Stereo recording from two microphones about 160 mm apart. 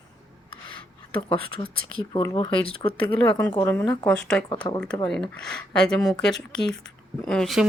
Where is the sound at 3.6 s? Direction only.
15° left (ahead or behind).